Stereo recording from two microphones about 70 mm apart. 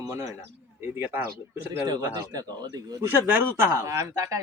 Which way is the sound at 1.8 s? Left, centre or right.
Right.